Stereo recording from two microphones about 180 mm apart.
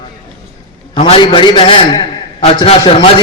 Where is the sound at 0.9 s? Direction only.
35° left (ahead or behind).